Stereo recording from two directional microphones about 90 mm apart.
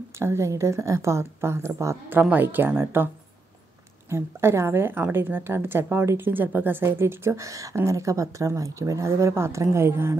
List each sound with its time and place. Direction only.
0.2 s a woman's voice: 30° right (ahead or behind)
2.0 s a woman's voice: 20° right (ahead or behind)
4.1 s a woman's voice: 30° right (ahead or behind)